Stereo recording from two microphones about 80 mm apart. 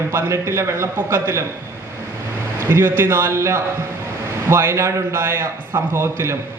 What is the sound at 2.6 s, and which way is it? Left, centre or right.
A man's voice, right.